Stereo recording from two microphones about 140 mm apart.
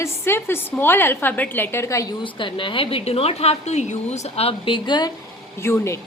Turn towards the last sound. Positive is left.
turn(degrees=20)  # may be behind; listen again after turning